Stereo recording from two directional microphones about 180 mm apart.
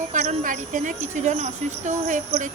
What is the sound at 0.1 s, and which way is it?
A woman's voice, 45° right (ahead or behind).